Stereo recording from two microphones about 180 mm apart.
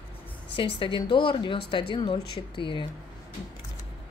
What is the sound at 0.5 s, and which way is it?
Speech, 30° left (ahead or behind).